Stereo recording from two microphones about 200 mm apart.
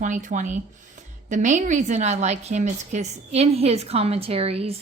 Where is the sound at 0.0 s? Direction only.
40° right (ahead or behind).